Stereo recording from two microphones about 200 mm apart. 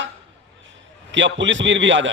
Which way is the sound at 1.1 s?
65° right (ahead or behind).